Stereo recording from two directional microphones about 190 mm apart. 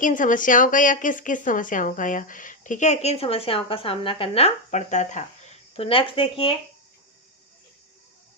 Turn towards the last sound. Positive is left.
turn(degrees=30)  # may be behind; listen again after turning